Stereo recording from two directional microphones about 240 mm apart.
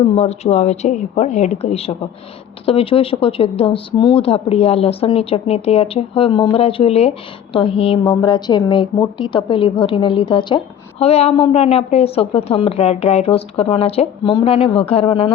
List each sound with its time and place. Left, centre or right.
0.0 s speech: left